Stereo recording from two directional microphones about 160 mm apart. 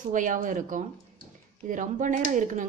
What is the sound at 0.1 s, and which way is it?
Speech, 55° right (ahead or behind).